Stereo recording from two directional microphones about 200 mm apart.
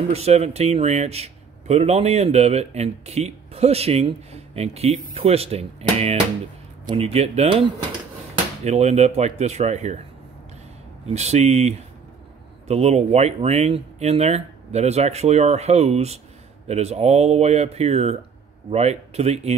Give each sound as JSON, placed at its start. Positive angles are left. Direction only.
{"t": 0.1, "sound": "a man's voice", "side_deg": -30}
{"t": 8.6, "sound": "a man's voice", "side_deg": -35}
{"t": 11.1, "sound": "a man's voice", "side_deg": -35}